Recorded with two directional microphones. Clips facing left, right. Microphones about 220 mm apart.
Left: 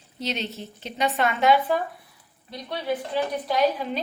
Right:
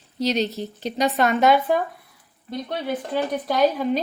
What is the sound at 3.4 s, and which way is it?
Speech, 50° right (ahead or behind).